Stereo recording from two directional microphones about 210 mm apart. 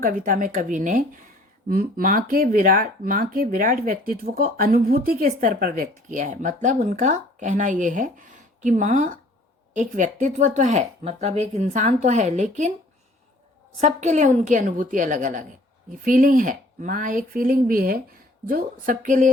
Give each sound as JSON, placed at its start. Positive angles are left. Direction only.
{"t": 0.0, "sound": "speech", "side_deg": -40}
{"t": 13.7, "sound": "speech", "side_deg": -35}